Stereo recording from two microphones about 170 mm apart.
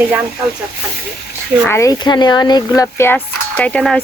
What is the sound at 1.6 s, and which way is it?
Speech, 15° left (ahead or behind).